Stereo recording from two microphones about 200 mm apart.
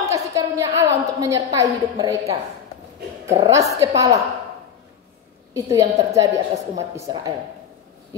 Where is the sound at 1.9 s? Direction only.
15° right (ahead or behind).